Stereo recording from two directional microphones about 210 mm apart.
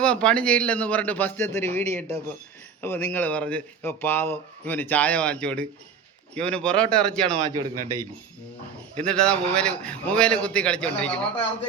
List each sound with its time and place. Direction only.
0.0 s a man's voice: 5° left (ahead or behind)
7.4 s a man's voice: 20° right (ahead or behind)
9.0 s a man's voice: 5° left (ahead or behind)